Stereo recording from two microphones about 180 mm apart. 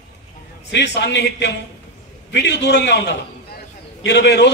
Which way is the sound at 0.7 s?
70° left (ahead or behind).